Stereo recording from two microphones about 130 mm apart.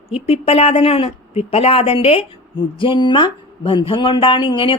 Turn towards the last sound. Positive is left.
turn(degrees=40)  # may be behind; listen again after turning